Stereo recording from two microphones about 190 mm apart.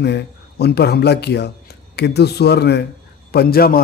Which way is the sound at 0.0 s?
60° left (ahead or behind).